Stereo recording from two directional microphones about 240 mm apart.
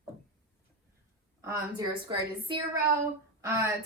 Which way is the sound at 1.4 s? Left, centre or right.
Centre.